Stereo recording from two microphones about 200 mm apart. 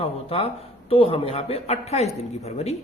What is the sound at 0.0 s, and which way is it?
A man's voice, 30° left (ahead or behind).